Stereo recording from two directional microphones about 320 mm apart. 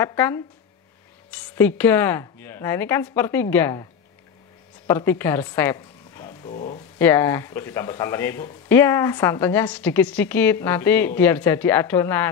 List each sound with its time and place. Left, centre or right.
0.0 s speech: centre
4.8 s speech: centre
7.0 s speech: centre